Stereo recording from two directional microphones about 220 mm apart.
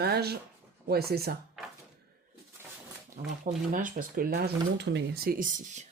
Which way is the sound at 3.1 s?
35° right (ahead or behind).